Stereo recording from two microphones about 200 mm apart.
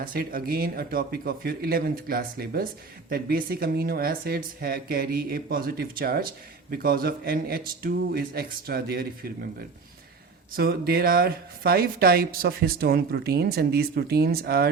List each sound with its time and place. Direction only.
0.0 s speech: 45° right (ahead or behind)
10.5 s speech: 50° right (ahead or behind)